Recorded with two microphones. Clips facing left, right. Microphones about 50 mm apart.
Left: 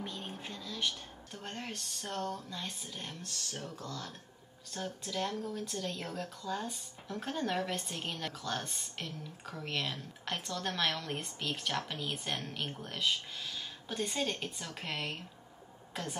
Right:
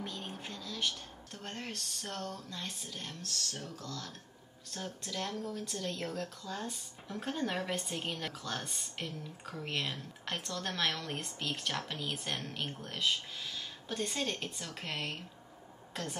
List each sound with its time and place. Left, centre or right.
0.0 s speech: centre
4.6 s a woman's voice: centre